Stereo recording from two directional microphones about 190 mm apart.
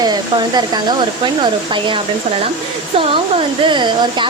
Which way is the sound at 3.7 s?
25° right (ahead or behind).